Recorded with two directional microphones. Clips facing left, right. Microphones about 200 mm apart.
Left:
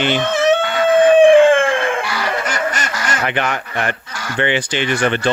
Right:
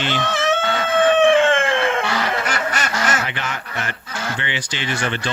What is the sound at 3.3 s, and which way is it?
Speech, 60° left (ahead or behind).